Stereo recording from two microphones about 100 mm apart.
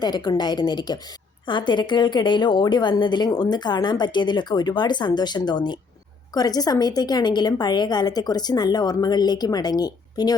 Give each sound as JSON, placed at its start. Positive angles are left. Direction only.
{"t": 0.0, "sound": "a woman's voice", "side_deg": 45}